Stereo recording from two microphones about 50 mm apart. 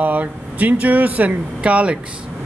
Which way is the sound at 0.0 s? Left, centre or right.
Right.